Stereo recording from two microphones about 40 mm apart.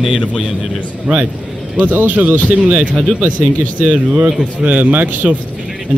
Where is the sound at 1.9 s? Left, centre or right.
Right.